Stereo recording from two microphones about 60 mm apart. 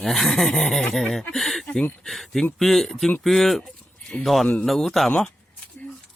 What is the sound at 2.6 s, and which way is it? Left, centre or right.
Speech, centre.